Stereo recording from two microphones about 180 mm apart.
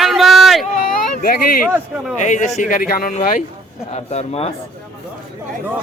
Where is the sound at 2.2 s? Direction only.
45° left (ahead or behind).